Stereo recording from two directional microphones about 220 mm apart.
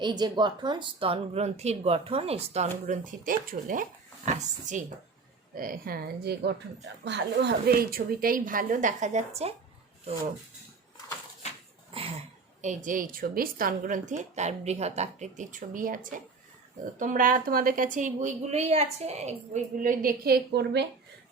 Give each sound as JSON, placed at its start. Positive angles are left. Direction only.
{"t": 0.0, "sound": "a woman's voice", "side_deg": -20}
{"t": 11.9, "sound": "a sound", "side_deg": -25}
{"t": 12.6, "sound": "a woman's voice", "side_deg": -35}